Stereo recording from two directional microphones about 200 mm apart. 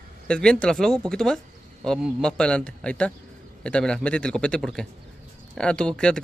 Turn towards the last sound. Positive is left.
turn(degrees=5)  # may be behind; listen again after turning